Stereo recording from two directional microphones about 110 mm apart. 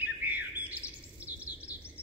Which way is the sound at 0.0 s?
15° right (ahead or behind).